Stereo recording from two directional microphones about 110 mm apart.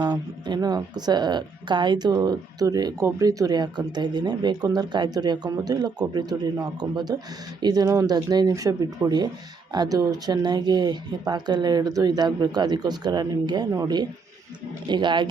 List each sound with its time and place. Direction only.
0.0 s speech: 40° right (ahead or behind)